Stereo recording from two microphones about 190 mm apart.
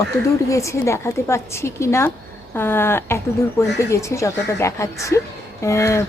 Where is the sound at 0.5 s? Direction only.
15° left (ahead or behind).